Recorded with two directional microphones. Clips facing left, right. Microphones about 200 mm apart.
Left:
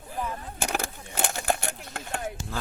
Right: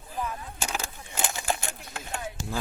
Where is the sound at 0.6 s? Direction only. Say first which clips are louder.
Left 5 dB; 60° left (ahead or behind).